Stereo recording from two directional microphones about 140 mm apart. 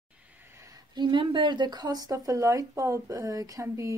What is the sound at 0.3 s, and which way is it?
Speech, 15° right (ahead or behind).